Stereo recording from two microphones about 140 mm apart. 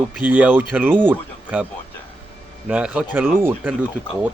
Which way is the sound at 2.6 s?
10° right (ahead or behind).